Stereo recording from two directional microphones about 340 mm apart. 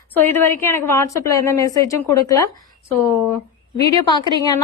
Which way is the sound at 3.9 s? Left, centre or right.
Centre.